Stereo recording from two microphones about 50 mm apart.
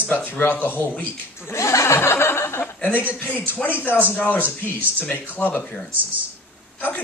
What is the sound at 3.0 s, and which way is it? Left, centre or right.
Speech, left.